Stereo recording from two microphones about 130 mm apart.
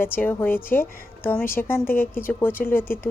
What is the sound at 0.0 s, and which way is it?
A woman's voice, 15° left (ahead or behind).